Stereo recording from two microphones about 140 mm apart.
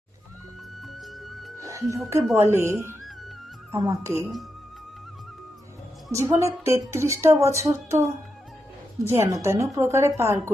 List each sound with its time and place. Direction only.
0.9 s music: centre (ahead or behind)
1.5 s music: 20° right (ahead or behind)
2.3 s speech: 20° right (ahead or behind)
3.8 s speech: 25° right (ahead or behind)
6.1 s speech: 20° right (ahead or behind)
9.0 s speech: 20° right (ahead or behind)